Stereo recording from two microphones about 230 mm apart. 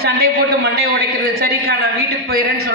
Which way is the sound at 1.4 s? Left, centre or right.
Right.